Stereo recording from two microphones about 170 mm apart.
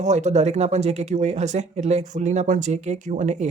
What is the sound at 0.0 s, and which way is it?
Speech, 45° right (ahead or behind).